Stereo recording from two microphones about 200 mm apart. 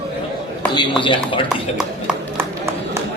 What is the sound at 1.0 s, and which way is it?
Speech, 25° left (ahead or behind).